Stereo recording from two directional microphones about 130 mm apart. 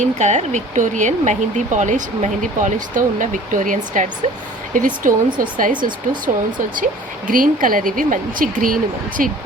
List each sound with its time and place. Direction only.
0.0 s speech: 65° right (ahead or behind)
5.0 s speech: 90° right